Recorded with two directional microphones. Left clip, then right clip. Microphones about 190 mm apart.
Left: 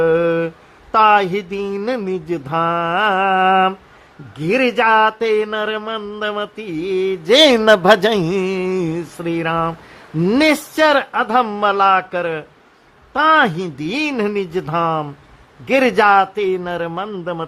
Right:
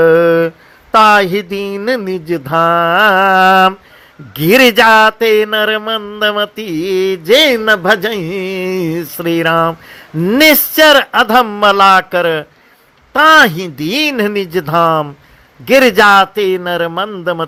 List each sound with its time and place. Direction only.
0.0 s mantra: 10° right (ahead or behind)
2.0 s speech: 10° right (ahead or behind)
7.3 s speech: 5° left (ahead or behind); by 17.1 s 15° right (ahead or behind)